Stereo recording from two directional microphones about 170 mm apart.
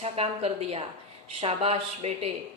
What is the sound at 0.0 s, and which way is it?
A woman's voice, 35° right (ahead or behind).